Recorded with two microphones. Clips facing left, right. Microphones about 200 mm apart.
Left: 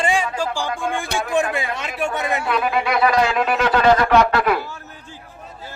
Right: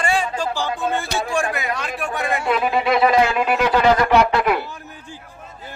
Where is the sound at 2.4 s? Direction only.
25° right (ahead or behind).